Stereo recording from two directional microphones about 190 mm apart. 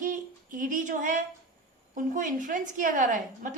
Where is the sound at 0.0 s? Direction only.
45° right (ahead or behind).